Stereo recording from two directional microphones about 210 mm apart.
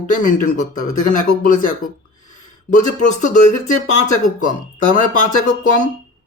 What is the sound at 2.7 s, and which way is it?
Speech, 35° left (ahead or behind).